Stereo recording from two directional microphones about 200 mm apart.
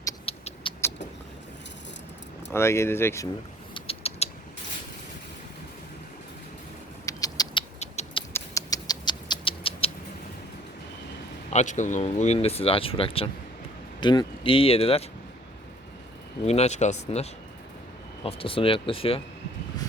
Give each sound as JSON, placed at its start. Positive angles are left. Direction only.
{"t": 0.3, "sound": "cat", "side_deg": 30}
{"t": 2.5, "sound": "speech", "side_deg": 15}
{"t": 3.8, "sound": "mechanisms", "side_deg": 30}
{"t": 7.0, "sound": "rodents", "side_deg": 15}
{"t": 7.8, "sound": "a sound", "side_deg": 35}
{"t": 8.3, "sound": "rodents", "side_deg": 15}
{"t": 11.5, "sound": "speech", "side_deg": 40}
{"t": 16.5, "sound": "speech", "side_deg": 35}